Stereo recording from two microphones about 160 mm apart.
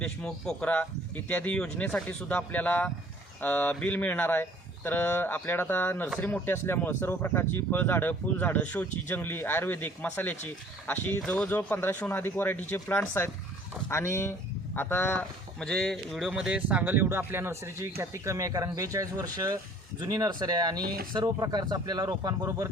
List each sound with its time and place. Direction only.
0.0 s speech: 5° left (ahead or behind); by 20.8 s 25° right (ahead or behind)
20.8 s speech: 70° right (ahead or behind)
21.1 s speech: 25° right (ahead or behind)